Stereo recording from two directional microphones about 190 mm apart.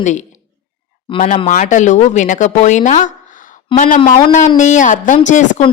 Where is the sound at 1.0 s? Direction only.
30° left (ahead or behind).